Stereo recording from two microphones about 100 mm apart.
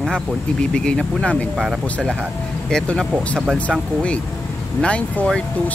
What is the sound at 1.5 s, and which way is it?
Speech, centre (ahead or behind).